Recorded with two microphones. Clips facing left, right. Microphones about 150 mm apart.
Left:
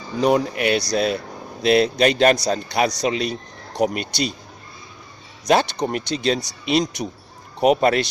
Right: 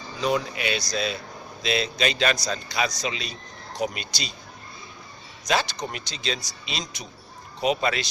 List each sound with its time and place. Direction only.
0.2 s a man's voice: 55° left (ahead or behind)
5.5 s a man's voice: 60° left (ahead or behind)